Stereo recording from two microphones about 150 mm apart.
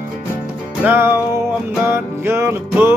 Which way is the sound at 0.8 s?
15° right (ahead or behind).